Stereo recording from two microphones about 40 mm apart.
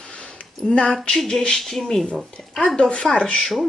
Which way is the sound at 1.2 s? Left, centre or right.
Centre.